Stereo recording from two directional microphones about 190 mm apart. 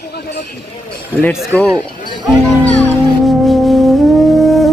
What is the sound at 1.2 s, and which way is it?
Speech, 10° left (ahead or behind).